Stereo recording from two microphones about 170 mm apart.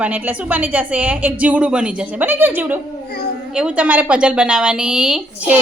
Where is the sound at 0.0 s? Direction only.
10° right (ahead or behind).